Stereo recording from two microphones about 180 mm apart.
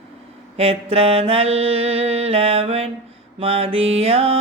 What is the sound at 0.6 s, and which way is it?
Mantra, 35° right (ahead or behind).